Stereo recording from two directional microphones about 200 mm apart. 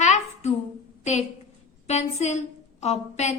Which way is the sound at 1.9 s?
35° left (ahead or behind).